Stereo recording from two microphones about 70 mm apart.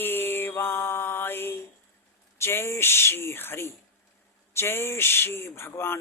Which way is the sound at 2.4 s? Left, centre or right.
Left.